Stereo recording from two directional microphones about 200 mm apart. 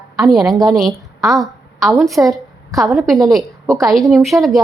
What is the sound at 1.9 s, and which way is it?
A woman's voice, centre (ahead or behind).